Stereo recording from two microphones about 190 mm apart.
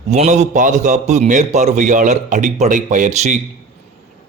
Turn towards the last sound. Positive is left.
turn(degrees=-40)  # may be behind; listen again after turning